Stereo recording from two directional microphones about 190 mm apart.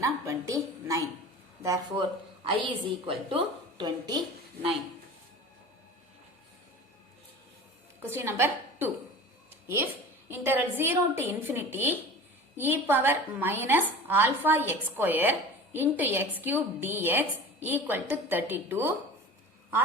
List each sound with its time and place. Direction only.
0.0 s a woman's voice: 15° right (ahead or behind)
2.4 s a woman's voice: 25° right (ahead or behind)
8.1 s a woman's voice: 15° right (ahead or behind)
10.2 s a woman's voice: 10° right (ahead or behind)